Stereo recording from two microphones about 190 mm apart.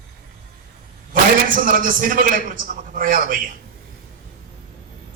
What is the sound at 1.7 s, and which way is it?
A man's voice, 45° right (ahead or behind).